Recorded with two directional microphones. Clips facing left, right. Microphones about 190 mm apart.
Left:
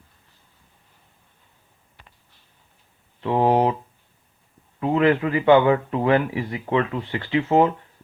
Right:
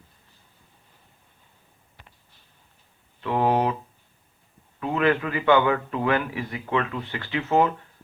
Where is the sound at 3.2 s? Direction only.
25° left (ahead or behind).